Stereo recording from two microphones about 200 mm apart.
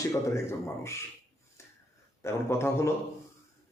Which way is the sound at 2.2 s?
15° left (ahead or behind).